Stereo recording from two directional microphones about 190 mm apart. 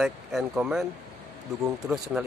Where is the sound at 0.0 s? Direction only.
5° right (ahead or behind).